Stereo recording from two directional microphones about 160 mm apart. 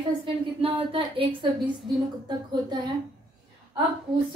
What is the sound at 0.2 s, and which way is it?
Speech, 35° right (ahead or behind).